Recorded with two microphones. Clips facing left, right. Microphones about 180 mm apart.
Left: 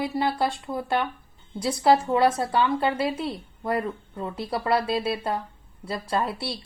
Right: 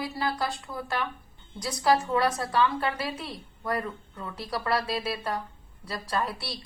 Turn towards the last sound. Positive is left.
turn(degrees=25)  # may be behind; listen again after turning